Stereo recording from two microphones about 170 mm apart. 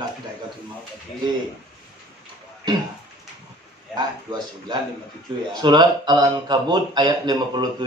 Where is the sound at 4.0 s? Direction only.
25° right (ahead or behind).